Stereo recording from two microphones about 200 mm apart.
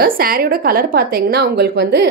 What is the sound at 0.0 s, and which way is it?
A woman's voice, 45° right (ahead or behind).